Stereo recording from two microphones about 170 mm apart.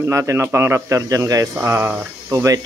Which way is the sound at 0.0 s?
15° right (ahead or behind).